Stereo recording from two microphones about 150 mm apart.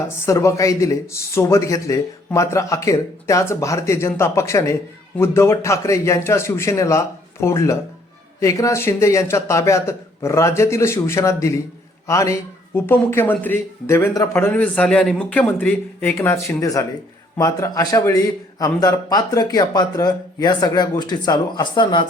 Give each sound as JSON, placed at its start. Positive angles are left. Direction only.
{"t": 0.3, "sound": "a man's voice", "side_deg": 20}